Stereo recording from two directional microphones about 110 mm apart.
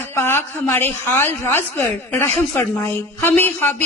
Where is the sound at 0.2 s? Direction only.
25° left (ahead or behind).